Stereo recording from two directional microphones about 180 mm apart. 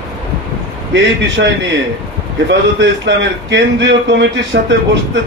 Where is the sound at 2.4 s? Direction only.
75° right (ahead or behind).